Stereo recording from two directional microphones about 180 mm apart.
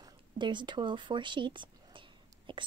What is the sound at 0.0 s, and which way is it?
Speech, 25° right (ahead or behind).